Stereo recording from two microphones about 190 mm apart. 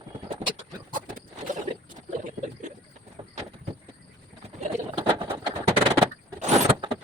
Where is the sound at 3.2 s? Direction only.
25° right (ahead or behind).